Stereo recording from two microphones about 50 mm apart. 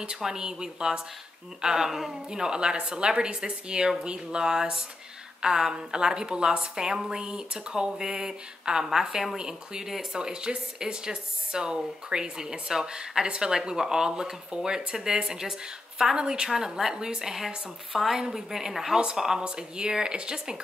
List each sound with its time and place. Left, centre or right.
0.2 s a woman's voice: centre